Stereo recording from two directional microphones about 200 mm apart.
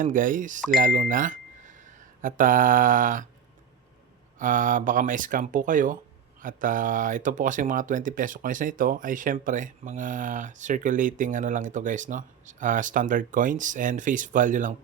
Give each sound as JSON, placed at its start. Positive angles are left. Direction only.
{"t": 0.0, "sound": "speech", "side_deg": -40}
{"t": 4.4, "sound": "speech", "side_deg": -40}